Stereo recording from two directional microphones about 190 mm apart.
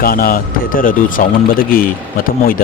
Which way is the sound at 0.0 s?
50° left (ahead or behind).